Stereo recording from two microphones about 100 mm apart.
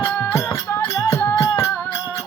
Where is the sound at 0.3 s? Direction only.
30° left (ahead or behind).